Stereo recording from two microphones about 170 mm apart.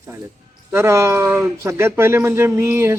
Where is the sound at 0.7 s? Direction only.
15° right (ahead or behind).